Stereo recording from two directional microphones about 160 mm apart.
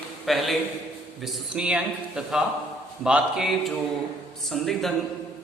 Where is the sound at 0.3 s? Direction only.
Centre (ahead or behind).